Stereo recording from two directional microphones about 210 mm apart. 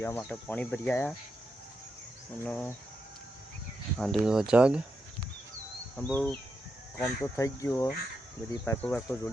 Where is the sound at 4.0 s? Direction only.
Centre (ahead or behind).